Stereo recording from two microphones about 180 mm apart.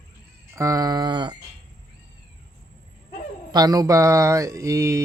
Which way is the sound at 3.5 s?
20° right (ahead or behind).